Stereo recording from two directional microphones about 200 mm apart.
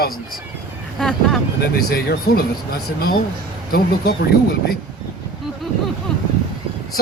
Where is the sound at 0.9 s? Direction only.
5° left (ahead or behind).